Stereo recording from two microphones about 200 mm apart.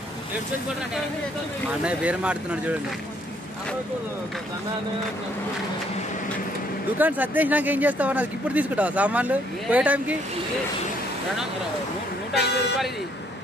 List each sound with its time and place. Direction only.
1.8 s speech: 5° right (ahead or behind)
7.0 s speech: 10° right (ahead or behind)
12.4 s speech: 55° left (ahead or behind)